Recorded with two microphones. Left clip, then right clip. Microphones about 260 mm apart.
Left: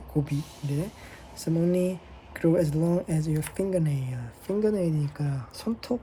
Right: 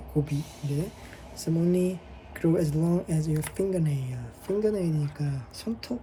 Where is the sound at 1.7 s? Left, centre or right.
Centre.